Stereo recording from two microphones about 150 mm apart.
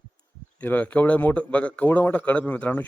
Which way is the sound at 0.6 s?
10° left (ahead or behind).